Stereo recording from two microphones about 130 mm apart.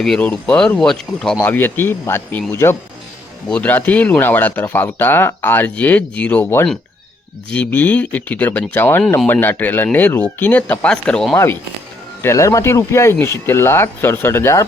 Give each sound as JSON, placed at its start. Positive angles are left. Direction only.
{"t": 0.0, "sound": "speech", "side_deg": 5}
{"t": 1.4, "sound": "speech", "side_deg": 15}
{"t": 12.2, "sound": "speech", "side_deg": 25}